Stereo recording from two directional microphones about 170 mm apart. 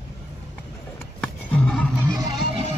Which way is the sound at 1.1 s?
5° left (ahead or behind).